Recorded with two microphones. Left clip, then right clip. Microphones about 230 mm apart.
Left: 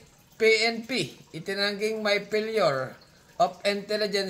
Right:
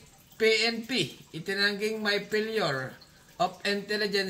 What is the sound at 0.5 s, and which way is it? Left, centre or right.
Speech, right.